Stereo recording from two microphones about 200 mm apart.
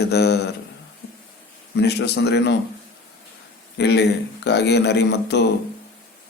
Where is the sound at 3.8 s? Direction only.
55° left (ahead or behind).